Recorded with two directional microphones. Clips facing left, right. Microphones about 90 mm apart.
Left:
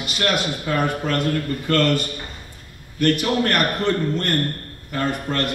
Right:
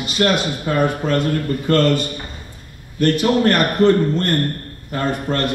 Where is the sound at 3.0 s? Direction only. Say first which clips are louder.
Right 3 dB; 30° right (ahead or behind).